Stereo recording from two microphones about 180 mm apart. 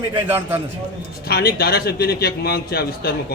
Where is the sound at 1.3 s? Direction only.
60° left (ahead or behind).